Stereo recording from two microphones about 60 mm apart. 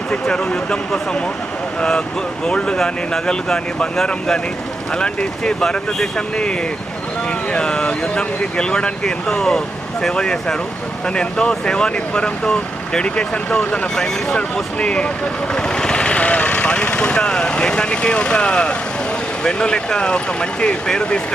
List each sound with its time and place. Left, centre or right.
0.1 s speech: centre